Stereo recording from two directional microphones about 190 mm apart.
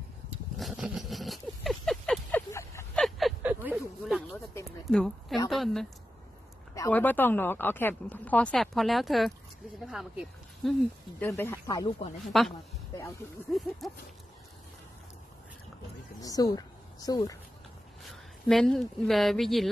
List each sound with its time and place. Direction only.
0.6 s a sound: centre (ahead or behind)
2.5 s a sound: 15° left (ahead or behind)
3.0 s a sound: centre (ahead or behind)
5.5 s speech: centre (ahead or behind)
6.7 s speech: 15° left (ahead or behind)
11.2 s speech: 10° left (ahead or behind)
12.3 s speech: centre (ahead or behind)
16.2 s speech: 20° left (ahead or behind)
18.5 s speech: centre (ahead or behind)